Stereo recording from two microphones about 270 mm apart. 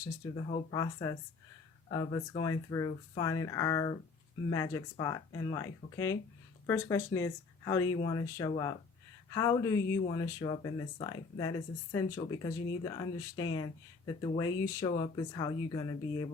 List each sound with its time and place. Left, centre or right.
0.7 s speech: centre